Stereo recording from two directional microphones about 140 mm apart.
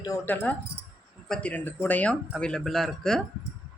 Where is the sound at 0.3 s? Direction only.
15° left (ahead or behind).